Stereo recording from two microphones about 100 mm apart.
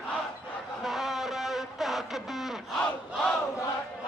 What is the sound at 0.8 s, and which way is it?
Music, centre (ahead or behind).